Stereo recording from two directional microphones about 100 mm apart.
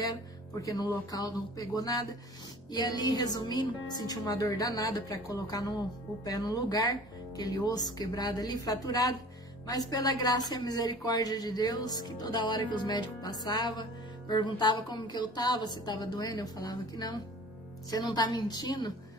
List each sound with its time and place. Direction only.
0.0 s music: 35° left (ahead or behind)
1.1 s a woman's voice: 35° left (ahead or behind)